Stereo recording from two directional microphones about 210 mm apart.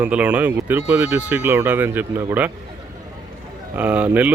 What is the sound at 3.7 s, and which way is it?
Speech, 5° right (ahead or behind).